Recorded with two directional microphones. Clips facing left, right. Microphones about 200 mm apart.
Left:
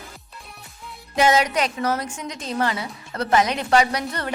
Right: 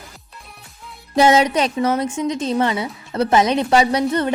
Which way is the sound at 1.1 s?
30° right (ahead or behind).